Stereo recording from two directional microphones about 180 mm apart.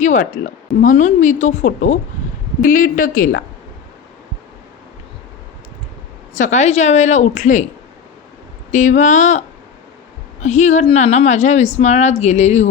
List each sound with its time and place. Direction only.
0.0 s a woman's voice: 45° left (ahead or behind)
6.3 s a woman's voice: 40° left (ahead or behind)
8.7 s a woman's voice: 45° left (ahead or behind)
10.4 s a woman's voice: 40° left (ahead or behind)